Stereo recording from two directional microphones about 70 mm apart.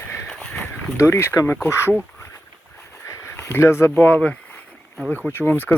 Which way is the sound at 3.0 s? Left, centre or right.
Left.